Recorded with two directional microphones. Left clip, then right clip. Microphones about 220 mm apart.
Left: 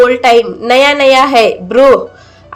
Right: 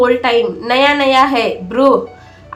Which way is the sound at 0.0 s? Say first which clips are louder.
Left 5 dB; 25° left (ahead or behind).